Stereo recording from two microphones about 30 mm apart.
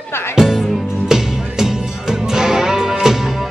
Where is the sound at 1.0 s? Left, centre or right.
Centre.